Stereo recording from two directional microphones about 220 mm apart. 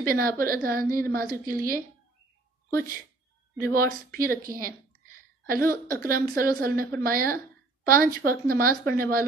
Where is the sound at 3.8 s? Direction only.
40° right (ahead or behind).